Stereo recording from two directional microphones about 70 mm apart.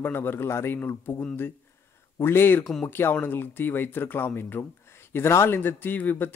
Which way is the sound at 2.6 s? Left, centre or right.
Centre.